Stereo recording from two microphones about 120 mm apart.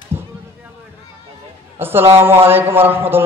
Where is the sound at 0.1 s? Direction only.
20° right (ahead or behind).